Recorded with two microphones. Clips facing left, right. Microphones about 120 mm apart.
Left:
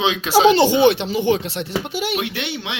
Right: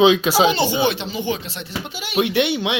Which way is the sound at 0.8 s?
65° left (ahead or behind).